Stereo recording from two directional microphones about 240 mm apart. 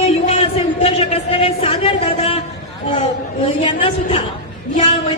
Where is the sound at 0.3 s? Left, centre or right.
Left.